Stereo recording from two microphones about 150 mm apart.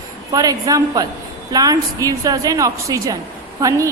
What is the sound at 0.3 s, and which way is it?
A woman's voice, 25° right (ahead or behind).